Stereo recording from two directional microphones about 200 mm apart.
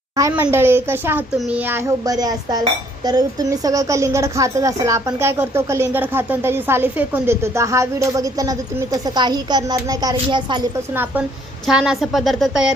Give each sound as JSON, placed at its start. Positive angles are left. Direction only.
{"t": 0.2, "sound": "a child's voice", "side_deg": -15}
{"t": 10.9, "sound": "a child's voice", "side_deg": -10}